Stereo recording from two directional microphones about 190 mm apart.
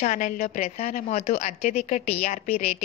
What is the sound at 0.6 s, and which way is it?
Speech, 35° left (ahead or behind).